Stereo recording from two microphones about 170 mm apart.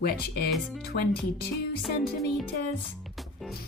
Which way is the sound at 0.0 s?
65° left (ahead or behind).